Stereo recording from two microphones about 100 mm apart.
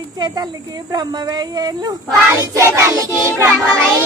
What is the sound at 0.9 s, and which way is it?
A child's voice, 40° right (ahead or behind).